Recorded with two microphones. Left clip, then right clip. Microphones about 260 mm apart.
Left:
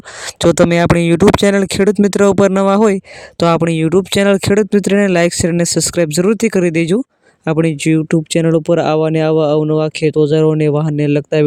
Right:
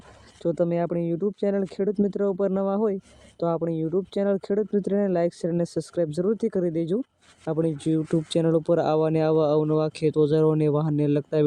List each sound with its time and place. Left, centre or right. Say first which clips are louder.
0.4 s speech: left 14 dB; left
1.8 s speech: left 13 dB; left
2.0 s speech: left 14 dB; left